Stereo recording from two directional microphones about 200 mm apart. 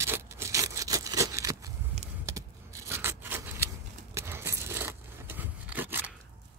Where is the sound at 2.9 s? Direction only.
10° right (ahead or behind).